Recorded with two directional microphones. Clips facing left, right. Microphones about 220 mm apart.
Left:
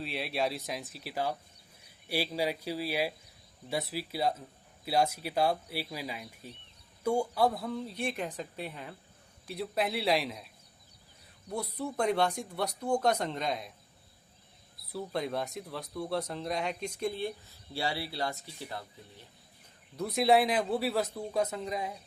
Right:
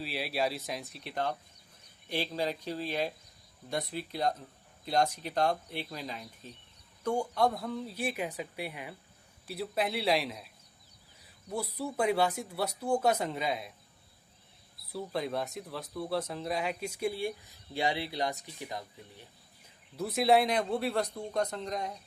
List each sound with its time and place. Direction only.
0.0 s speech: centre (ahead or behind)
9.5 s speech: centre (ahead or behind)
14.8 s speech: centre (ahead or behind)
20.0 s speech: centre (ahead or behind)